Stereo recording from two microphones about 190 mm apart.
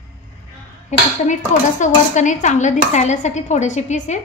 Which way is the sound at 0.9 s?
35° left (ahead or behind).